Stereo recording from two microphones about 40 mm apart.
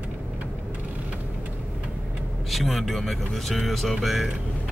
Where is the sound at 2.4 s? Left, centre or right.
Centre.